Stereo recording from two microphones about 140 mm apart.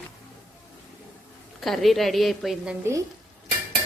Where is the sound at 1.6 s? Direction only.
Centre (ahead or behind).